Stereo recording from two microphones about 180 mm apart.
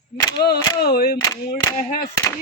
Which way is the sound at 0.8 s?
60° left (ahead or behind).